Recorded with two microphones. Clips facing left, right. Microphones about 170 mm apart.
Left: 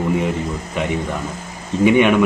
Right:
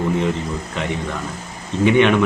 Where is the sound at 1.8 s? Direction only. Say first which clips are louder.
Left 1 dB; 10° left (ahead or behind).